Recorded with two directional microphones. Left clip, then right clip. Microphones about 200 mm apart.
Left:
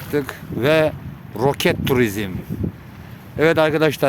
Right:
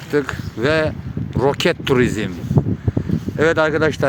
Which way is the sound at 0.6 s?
10° left (ahead or behind).